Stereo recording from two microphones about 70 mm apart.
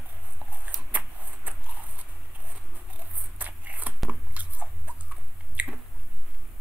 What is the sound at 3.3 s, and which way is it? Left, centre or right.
Scissors, right.